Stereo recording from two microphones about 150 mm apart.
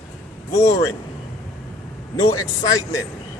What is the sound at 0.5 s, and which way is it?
Speech, 20° left (ahead or behind).